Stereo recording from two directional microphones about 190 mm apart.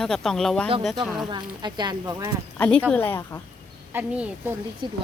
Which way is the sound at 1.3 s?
25° right (ahead or behind).